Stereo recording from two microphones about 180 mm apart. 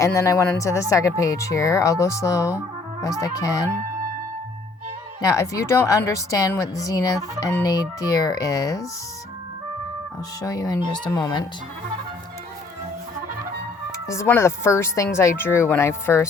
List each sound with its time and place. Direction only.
0.0 s a woman's voice: 15° left (ahead or behind)
5.2 s a woman's voice: 20° left (ahead or behind)
10.4 s a woman's voice: 20° left (ahead or behind)
14.1 s speech: 15° left (ahead or behind)